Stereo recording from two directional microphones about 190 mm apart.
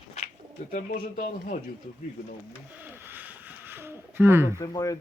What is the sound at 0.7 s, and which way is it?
Speech, 45° left (ahead or behind).